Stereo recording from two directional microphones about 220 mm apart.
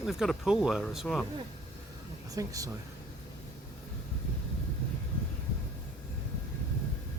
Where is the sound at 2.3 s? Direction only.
15° right (ahead or behind).